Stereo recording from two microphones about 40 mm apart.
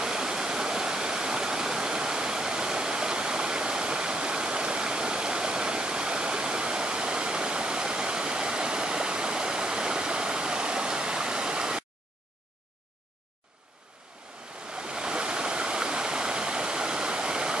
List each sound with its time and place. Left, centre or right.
0.0 s stream: centre
14.7 s stream: right